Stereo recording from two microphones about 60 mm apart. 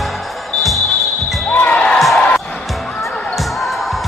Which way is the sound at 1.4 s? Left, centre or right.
Left.